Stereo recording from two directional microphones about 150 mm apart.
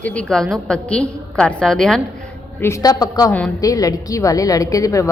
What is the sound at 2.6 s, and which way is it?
A woman's voice, 20° left (ahead or behind).